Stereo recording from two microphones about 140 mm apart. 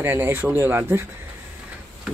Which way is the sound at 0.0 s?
15° right (ahead or behind).